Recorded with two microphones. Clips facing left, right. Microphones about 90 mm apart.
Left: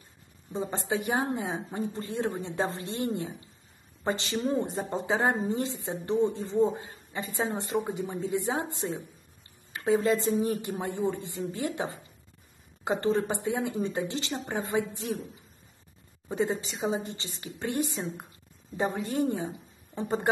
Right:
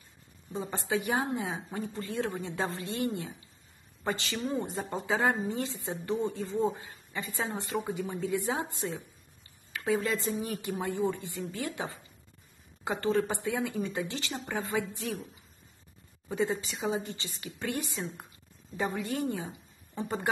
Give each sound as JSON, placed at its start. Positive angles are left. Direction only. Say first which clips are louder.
{"t": 0.6, "sound": "a woman's voice", "louder": "left 2 dB", "side_deg": 25}
{"t": 16.3, "sound": "a woman's voice", "louder": "left 2 dB", "side_deg": 30}